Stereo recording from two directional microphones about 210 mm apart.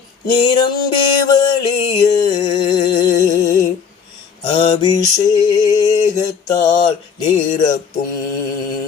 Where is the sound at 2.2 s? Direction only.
20° left (ahead or behind).